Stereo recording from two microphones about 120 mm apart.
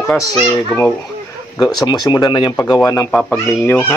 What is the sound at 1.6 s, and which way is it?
Speech, 35° left (ahead or behind).